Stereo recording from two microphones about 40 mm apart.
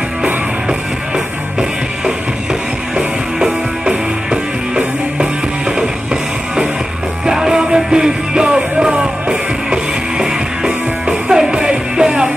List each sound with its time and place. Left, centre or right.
0.2 s music: centre
3.3 s music: centre
7.2 s music: centre